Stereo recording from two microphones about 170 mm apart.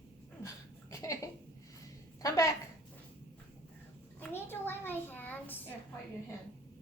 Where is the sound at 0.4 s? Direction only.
20° left (ahead or behind).